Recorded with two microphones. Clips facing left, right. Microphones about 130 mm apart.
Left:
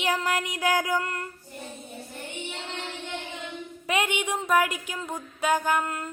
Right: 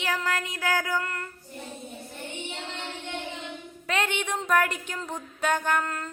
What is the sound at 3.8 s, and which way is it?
Speech, 15° left (ahead or behind).